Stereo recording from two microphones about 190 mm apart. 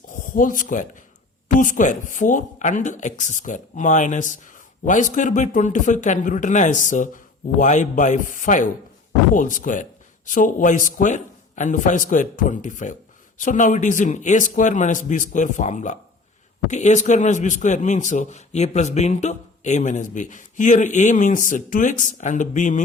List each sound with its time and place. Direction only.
0.1 s speech: 45° left (ahead or behind)